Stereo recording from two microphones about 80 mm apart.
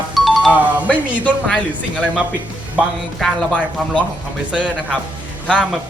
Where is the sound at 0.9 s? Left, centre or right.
Centre.